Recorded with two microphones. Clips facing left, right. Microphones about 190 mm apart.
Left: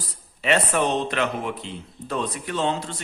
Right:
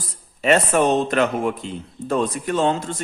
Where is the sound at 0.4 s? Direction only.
45° right (ahead or behind).